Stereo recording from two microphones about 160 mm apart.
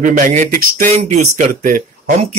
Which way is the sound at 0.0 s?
50° right (ahead or behind).